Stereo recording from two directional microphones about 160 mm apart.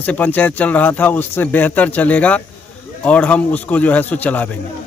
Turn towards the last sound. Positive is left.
turn(degrees=10)  # may be behind; listen again after turning